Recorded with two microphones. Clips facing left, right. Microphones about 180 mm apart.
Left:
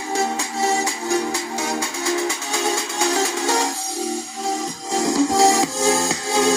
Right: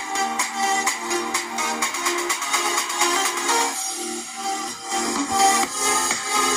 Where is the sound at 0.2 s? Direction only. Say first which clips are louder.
Left 3 dB; 40° left (ahead or behind).